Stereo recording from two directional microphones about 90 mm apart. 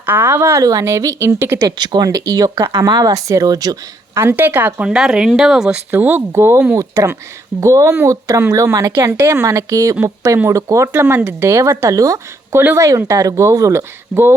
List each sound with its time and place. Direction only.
0.0 s speech: 25° right (ahead or behind)
0.6 s a woman's voice: 40° right (ahead or behind)
1.6 s speech: 50° right (ahead or behind)
2.0 s speech: 40° right (ahead or behind)
4.1 s speech: 25° right (ahead or behind)
4.9 s speech: 5° right (ahead or behind)
5.9 s a woman's voice: 20° right (ahead or behind)
11.0 s a woman's voice: 25° right (ahead or behind)